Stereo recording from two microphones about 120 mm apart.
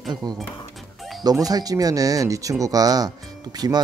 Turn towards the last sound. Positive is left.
turn(degrees=-35)  # may be behind; listen again after turning